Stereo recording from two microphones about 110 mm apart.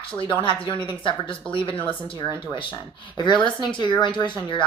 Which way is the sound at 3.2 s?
45° left (ahead or behind).